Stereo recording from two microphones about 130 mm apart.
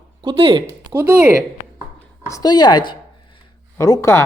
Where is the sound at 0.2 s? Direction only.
40° right (ahead or behind).